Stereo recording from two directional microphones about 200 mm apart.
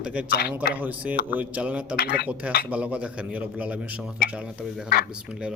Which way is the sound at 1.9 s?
55° left (ahead or behind).